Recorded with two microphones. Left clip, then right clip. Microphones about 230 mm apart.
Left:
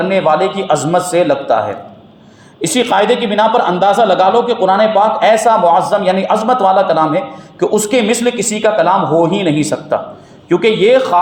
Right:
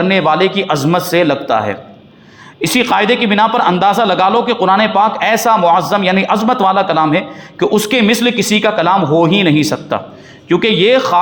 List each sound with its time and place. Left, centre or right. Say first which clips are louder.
0.1 s speech: left 1 dB; right
2.6 s speech: even; right